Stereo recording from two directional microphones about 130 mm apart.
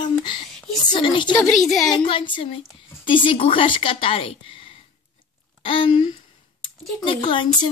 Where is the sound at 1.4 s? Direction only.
Centre (ahead or behind).